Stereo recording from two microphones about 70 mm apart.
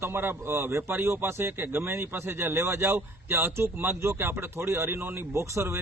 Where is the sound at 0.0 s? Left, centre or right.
Right.